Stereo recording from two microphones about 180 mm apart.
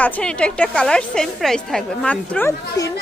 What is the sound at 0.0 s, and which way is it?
A woman's voice, 5° left (ahead or behind).